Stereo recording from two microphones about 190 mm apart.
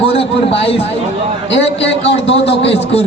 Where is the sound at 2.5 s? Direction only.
65° left (ahead or behind).